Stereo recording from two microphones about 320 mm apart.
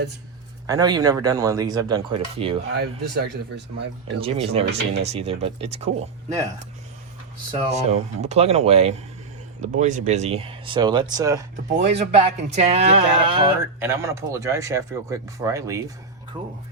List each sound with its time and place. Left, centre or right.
0.7 s speech: centre
2.7 s speech: right
4.2 s speech: centre
7.5 s speech: centre